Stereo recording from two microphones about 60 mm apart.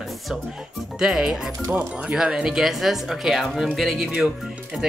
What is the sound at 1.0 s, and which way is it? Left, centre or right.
Speech, centre.